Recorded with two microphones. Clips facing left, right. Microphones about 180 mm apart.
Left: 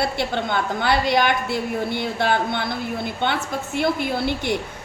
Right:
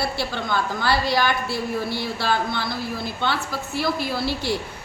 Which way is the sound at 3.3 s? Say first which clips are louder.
Left 2 dB; 20° left (ahead or behind).